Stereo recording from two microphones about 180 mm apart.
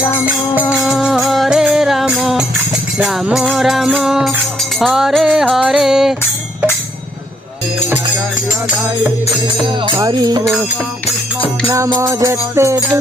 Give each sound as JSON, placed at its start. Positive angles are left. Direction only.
{"t": 0.6, "sound": "music", "side_deg": 10}
{"t": 0.9, "sound": "music", "side_deg": -5}
{"t": 9.9, "sound": "music", "side_deg": -20}
{"t": 11.7, "sound": "music", "side_deg": -15}